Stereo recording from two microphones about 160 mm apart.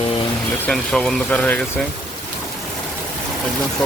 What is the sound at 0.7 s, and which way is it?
Speech, centre (ahead or behind).